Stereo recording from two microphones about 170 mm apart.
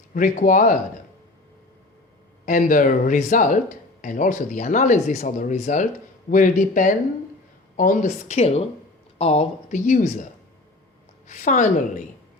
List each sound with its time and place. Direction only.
0.1 s speech: 50° left (ahead or behind)
2.5 s speech: 50° left (ahead or behind)
11.3 s speech: 45° left (ahead or behind)